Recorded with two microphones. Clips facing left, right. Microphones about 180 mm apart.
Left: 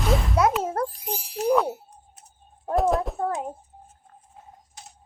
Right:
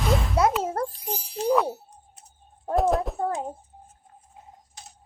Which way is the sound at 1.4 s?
5° left (ahead or behind).